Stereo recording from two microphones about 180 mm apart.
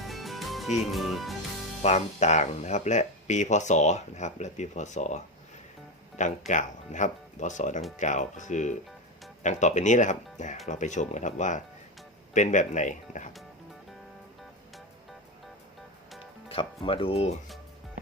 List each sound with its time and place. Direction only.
0.0 s music: centre (ahead or behind)
1.8 s speech: 40° left (ahead or behind)
16.5 s speech: 30° left (ahead or behind)